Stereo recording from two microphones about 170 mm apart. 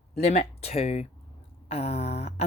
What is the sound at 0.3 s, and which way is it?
Speech, 35° left (ahead or behind).